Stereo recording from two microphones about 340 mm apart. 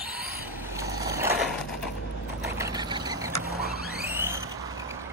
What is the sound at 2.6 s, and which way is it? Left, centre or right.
Vehicle, centre.